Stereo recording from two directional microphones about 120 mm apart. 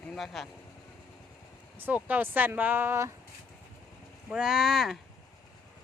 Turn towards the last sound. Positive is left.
turn(degrees=0)  # may be behind; listen again after turning